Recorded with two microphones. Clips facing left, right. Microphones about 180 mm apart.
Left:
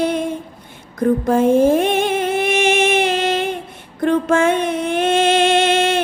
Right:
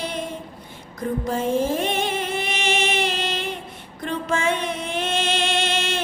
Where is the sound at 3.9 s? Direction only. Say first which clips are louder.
Left 10 dB; 55° left (ahead or behind).